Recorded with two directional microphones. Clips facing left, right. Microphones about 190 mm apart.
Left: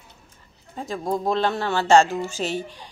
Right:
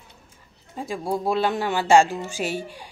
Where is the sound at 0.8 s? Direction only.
10° right (ahead or behind).